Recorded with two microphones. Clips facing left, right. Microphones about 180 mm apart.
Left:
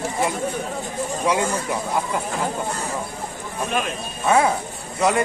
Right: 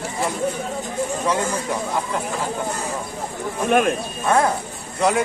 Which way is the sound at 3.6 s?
55° right (ahead or behind).